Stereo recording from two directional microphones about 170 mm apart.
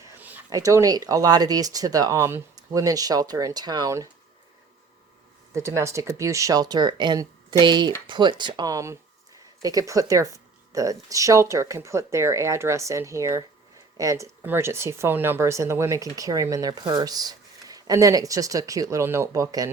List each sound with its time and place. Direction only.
0.0 s speech: 15° right (ahead or behind)
5.5 s speech: 15° right (ahead or behind)